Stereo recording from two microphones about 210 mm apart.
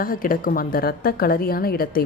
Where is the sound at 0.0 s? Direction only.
40° left (ahead or behind).